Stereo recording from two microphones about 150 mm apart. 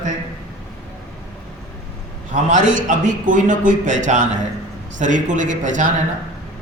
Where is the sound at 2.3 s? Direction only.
55° right (ahead or behind).